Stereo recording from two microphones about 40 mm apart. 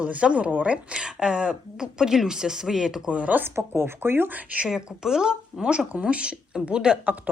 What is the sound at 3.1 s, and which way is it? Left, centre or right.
Speech, right.